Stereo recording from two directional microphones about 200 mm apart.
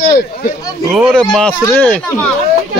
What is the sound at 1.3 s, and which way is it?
Speech, 5° left (ahead or behind).